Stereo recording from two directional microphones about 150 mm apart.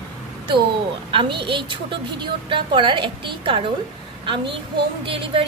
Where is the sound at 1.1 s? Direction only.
35° right (ahead or behind).